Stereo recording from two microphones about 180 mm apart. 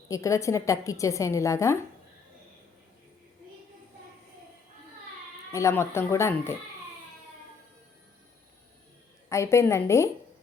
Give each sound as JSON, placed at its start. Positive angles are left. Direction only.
{"t": 0.1, "sound": "a woman's voice", "side_deg": 15}
{"t": 5.5, "sound": "a woman's voice", "side_deg": 15}
{"t": 9.3, "sound": "a woman's voice", "side_deg": 15}